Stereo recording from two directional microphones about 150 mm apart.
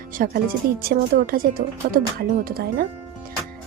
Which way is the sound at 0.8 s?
80° right.